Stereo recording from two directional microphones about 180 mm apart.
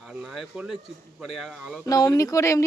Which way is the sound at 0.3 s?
5° right (ahead or behind).